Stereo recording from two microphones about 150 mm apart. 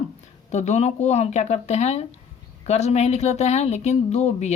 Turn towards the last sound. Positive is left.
turn(degrees=50)  # may be behind; listen again after turning